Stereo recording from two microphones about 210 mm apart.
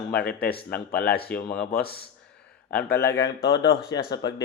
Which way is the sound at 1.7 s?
50° left (ahead or behind).